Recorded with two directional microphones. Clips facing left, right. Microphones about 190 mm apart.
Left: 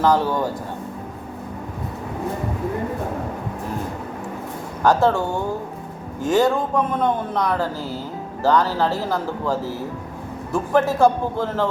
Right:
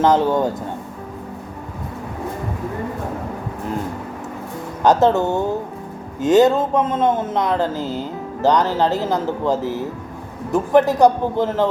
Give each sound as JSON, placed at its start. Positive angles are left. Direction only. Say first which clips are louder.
{"t": 0.0, "sound": "a man's voice", "louder": "right 3 dB", "side_deg": -20}
{"t": 4.8, "sound": "a man's voice", "louder": "right 3 dB", "side_deg": -20}